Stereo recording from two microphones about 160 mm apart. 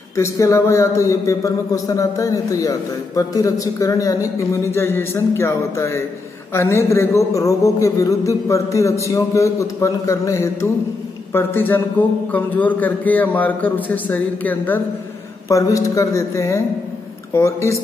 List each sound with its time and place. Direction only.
0.1 s a man's voice: 20° left (ahead or behind)
15.4 s a man's voice: 20° left (ahead or behind)